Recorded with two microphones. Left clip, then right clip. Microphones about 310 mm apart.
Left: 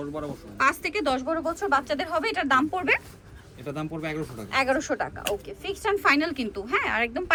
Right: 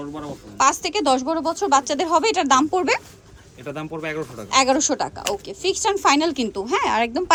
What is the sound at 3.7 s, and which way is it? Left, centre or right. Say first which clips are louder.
Speech: right 4 dB; centre.